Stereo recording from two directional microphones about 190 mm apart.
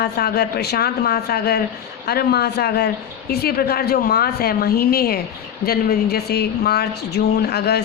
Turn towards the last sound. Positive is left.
turn(degrees=60)  # may be behind; listen again after turning